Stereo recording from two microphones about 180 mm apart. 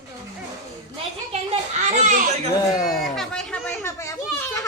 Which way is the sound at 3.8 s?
20° left (ahead or behind).